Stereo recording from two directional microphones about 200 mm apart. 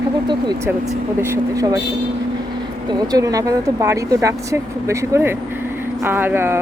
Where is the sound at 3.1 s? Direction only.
15° right (ahead or behind).